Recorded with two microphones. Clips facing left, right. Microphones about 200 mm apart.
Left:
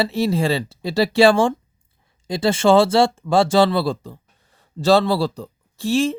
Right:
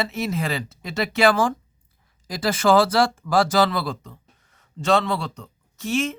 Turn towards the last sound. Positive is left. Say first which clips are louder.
# left 5 dB
turn(degrees=30)  # may be behind; listen again after turning